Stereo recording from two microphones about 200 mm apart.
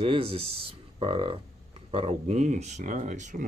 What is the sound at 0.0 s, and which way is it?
Speech, 25° right (ahead or behind).